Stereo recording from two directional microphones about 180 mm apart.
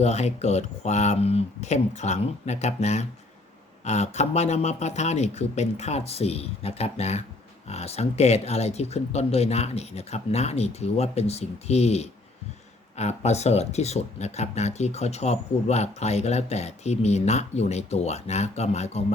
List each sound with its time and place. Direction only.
0.0 s speech: 40° left (ahead or behind)